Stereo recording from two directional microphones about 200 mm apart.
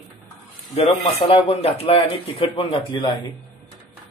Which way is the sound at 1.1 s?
30° left (ahead or behind).